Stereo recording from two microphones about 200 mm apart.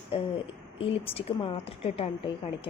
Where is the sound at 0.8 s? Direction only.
30° left (ahead or behind).